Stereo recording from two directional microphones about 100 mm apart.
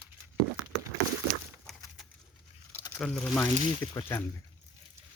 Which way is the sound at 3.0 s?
10° left (ahead or behind).